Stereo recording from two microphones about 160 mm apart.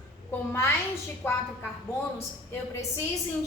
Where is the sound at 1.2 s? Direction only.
15° left (ahead or behind).